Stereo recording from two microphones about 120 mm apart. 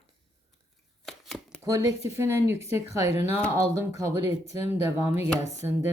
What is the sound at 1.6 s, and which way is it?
A woman's voice, 25° right (ahead or behind).